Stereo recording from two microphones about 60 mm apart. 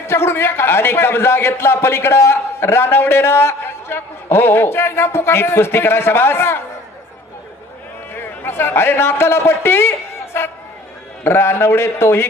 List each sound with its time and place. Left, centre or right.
0.0 s a man's voice: left
8.1 s a man's voice: left